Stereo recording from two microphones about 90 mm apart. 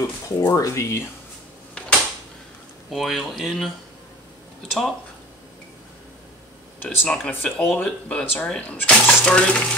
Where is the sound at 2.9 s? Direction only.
Centre (ahead or behind).